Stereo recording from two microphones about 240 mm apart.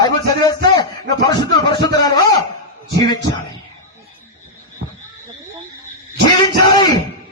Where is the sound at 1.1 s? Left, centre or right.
Centre.